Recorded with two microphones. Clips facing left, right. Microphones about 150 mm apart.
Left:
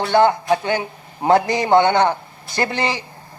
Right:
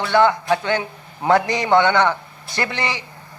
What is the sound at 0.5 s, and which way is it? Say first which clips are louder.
A man's voice: left 1 dB; 15° left (ahead or behind).